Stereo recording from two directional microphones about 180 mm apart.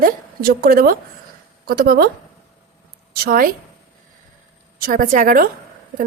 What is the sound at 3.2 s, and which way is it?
Speech, 55° right (ahead or behind).